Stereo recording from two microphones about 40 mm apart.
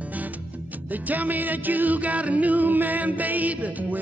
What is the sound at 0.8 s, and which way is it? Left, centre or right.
Music, right.